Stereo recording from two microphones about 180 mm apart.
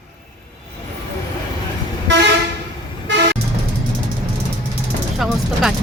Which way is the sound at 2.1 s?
90° right.